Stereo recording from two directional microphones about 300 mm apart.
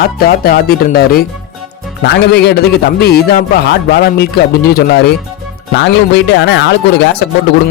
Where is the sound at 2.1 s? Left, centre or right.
Left.